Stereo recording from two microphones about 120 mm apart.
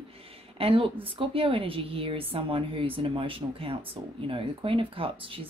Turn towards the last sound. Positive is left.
turn(degrees=-50)  # may be behind; listen again after turning